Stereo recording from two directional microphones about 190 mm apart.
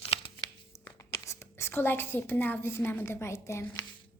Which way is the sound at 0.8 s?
15° left (ahead or behind).